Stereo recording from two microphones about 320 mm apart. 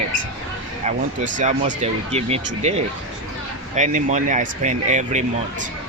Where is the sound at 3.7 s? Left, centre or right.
Right.